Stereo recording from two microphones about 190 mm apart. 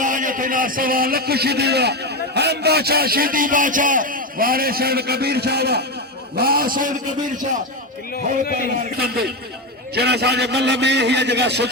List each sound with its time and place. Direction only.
0.0 s a man's voice: 45° right (ahead or behind)
8.1 s speech: 50° left (ahead or behind)
9.0 s a man's voice: 55° right (ahead or behind)